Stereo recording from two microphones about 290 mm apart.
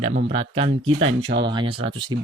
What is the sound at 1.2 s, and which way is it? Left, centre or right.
Speech, right.